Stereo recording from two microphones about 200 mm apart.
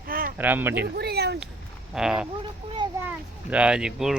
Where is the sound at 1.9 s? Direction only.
5° right (ahead or behind).